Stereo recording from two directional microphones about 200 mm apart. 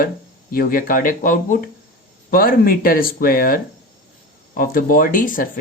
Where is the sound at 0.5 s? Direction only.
45° left (ahead or behind).